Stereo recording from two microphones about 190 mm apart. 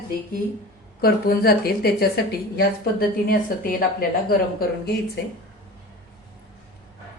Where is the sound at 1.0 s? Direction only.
50° left (ahead or behind).